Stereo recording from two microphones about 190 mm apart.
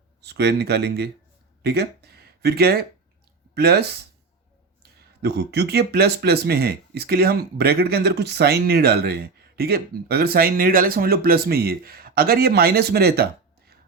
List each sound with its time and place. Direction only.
0.2 s speech: 60° right (ahead or behind)
4.9 s speech: 60° right (ahead or behind)